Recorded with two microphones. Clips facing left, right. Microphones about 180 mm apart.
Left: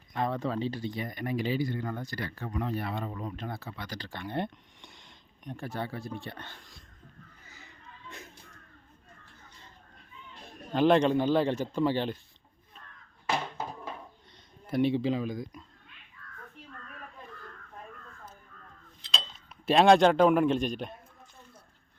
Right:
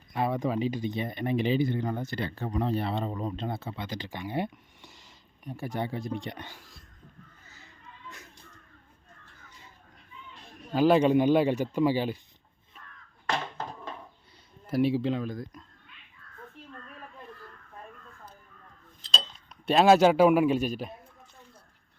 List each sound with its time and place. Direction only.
0.1 s speech: 10° right (ahead or behind)
5.6 s speech: 15° right (ahead or behind)
7.4 s a sound: 15° left (ahead or behind)
10.6 s a man's voice: 5° right (ahead or behind)
13.2 s a sound: 10° left (ahead or behind)
14.7 s a man's voice: centre (ahead or behind)
19.6 s a man's voice: centre (ahead or behind)